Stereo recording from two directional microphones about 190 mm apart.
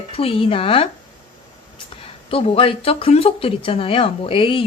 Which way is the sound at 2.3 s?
30° left (ahead or behind).